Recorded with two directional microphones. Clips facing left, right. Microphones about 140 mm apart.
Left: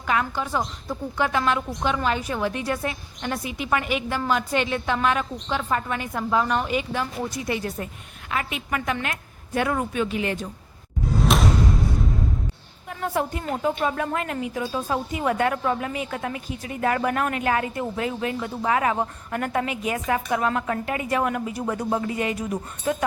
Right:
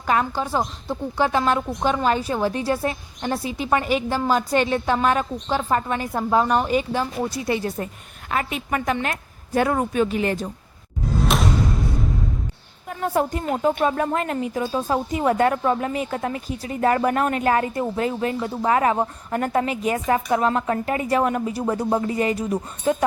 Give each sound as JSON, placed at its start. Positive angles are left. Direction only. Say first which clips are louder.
{"t": 0.0, "sound": "a woman's voice", "louder": "right 3 dB", "side_deg": -35}
{"t": 11.2, "sound": "music", "louder": "left 1 dB", "side_deg": 0}
{"t": 13.1, "sound": "speech", "louder": "right 4 dB", "side_deg": -45}
{"t": 13.8, "sound": "a woman's voice", "louder": "right 4 dB", "side_deg": -35}